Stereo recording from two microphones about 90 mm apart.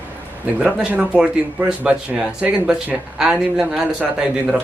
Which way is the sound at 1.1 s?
10° right (ahead or behind).